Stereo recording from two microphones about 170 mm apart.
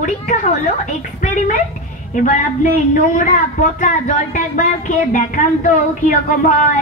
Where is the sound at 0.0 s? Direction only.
45° left (ahead or behind).